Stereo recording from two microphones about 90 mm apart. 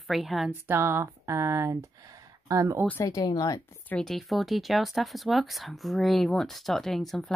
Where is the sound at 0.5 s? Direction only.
25° right (ahead or behind).